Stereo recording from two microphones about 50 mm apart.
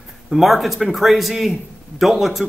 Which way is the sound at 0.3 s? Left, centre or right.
Centre.